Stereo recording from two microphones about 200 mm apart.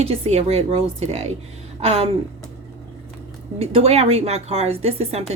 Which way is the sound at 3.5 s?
30° right (ahead or behind).